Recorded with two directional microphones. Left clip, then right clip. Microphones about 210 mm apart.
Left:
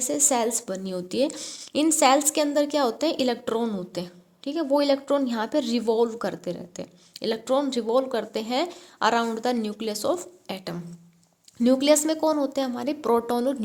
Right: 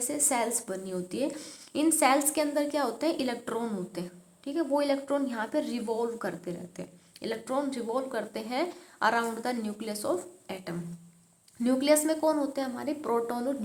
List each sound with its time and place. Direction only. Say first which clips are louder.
0.0 s a woman's voice: left 6 dB; 40° left (ahead or behind)